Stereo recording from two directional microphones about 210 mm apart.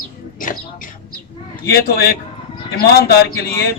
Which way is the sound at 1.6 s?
50° left (ahead or behind).